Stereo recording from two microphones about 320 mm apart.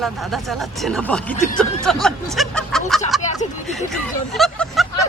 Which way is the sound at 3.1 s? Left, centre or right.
Centre.